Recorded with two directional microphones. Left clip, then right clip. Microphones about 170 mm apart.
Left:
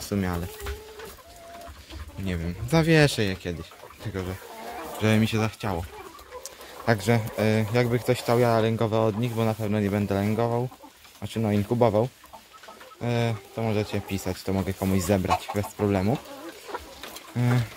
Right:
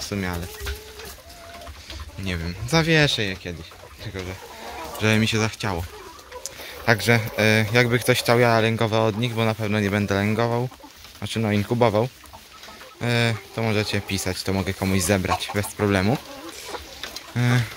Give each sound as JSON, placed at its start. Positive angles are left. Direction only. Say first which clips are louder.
{"t": 0.0, "sound": "speech", "louder": "right 1 dB", "side_deg": 25}
{"t": 2.2, "sound": "speech", "louder": "right 3 dB", "side_deg": 15}
{"t": 4.9, "sound": "speech", "louder": "right 4 dB", "side_deg": 15}
{"t": 17.4, "sound": "speech", "louder": "right 4 dB", "side_deg": 5}